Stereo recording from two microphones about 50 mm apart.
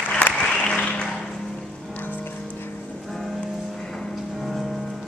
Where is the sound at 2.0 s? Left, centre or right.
Left.